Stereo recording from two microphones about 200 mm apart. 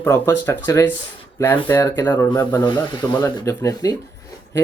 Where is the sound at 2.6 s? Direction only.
20° left (ahead or behind).